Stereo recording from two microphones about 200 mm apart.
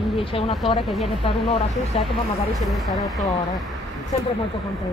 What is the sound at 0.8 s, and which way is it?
Speech, centre (ahead or behind).